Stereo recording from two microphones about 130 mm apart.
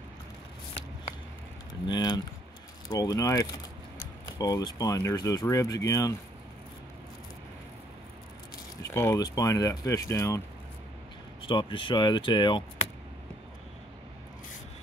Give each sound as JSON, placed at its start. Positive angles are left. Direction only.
{"t": 1.9, "sound": "speech", "side_deg": 35}
{"t": 8.8, "sound": "speech", "side_deg": 20}
{"t": 11.4, "sound": "speech", "side_deg": 40}